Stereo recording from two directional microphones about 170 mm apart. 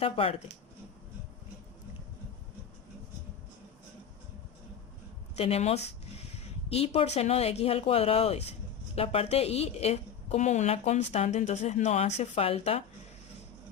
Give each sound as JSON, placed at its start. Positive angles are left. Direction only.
{"t": 0.0, "sound": "a woman's voice", "side_deg": 35}
{"t": 5.4, "sound": "a woman's voice", "side_deg": 35}